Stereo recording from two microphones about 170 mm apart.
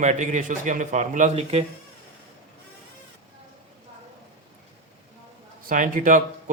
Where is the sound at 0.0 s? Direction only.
45° right (ahead or behind).